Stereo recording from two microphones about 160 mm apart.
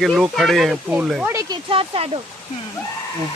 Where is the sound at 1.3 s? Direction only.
25° right (ahead or behind).